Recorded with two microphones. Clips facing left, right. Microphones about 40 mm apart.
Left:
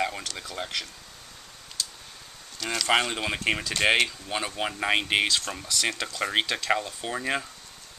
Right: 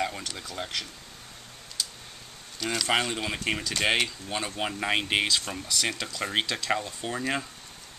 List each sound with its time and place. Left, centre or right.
0.0 s a sound: centre
0.4 s speech: centre
2.6 s speech: centre
2.9 s speech: centre